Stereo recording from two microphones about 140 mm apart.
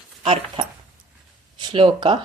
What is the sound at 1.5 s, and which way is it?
Speech, 35° right (ahead or behind).